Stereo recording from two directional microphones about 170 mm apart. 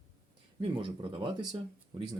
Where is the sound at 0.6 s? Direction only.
30° right (ahead or behind).